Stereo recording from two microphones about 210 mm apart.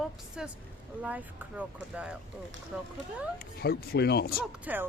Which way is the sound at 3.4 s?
50° left (ahead or behind).